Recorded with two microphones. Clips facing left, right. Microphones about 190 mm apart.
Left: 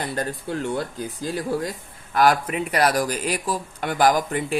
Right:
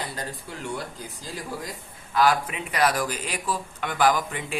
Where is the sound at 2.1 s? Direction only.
50° left (ahead or behind).